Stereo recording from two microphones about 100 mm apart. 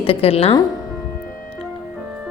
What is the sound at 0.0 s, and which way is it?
Speech, 75° left (ahead or behind).